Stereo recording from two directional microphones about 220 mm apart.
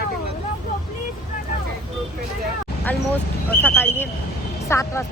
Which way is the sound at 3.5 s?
10° left (ahead or behind).